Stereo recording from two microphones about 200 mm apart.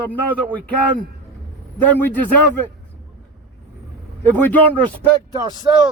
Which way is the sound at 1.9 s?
10° left (ahead or behind).